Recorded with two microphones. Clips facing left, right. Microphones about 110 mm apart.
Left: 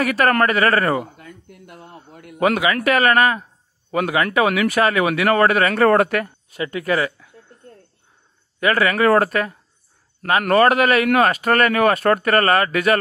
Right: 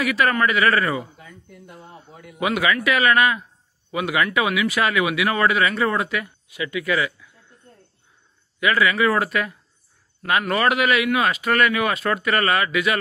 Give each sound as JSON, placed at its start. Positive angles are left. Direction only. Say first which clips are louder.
{"t": 0.0, "sound": "speech", "louder": "left 3 dB", "side_deg": 50}
{"t": 8.5, "sound": "speech", "louder": "left 2 dB", "side_deg": 40}